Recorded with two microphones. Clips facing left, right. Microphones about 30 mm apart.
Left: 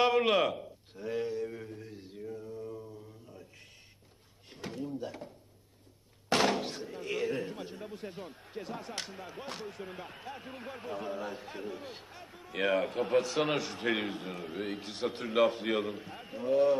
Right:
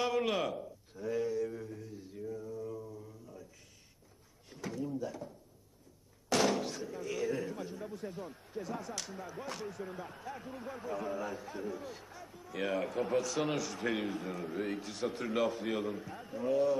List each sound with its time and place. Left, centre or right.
0.0 s a sound: left
2.9 s mantra: left
4.5 s drawer open or close: left
4.9 s a sound: left
6.2 s slam: left
8.5 s speech: left